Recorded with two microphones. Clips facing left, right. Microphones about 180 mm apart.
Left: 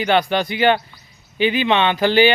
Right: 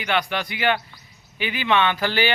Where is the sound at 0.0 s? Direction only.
30° left (ahead or behind).